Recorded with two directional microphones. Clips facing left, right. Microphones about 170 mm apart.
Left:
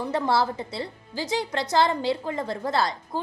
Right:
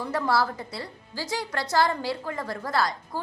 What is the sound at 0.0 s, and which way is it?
A woman's voice, 25° left (ahead or behind).